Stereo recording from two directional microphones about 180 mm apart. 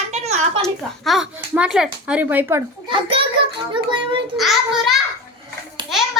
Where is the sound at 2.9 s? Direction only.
30° right (ahead or behind).